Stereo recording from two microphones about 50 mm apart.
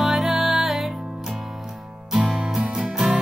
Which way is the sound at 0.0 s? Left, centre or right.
Centre.